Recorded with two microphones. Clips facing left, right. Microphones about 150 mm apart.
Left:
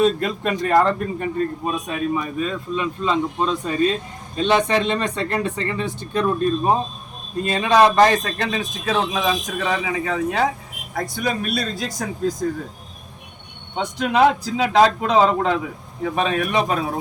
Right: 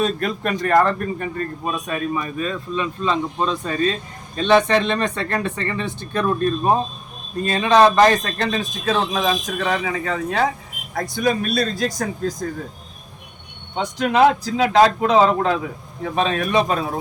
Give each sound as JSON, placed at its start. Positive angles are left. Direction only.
{"t": 0.2, "sound": "a man's voice", "side_deg": 15}
{"t": 13.7, "sound": "a man's voice", "side_deg": 0}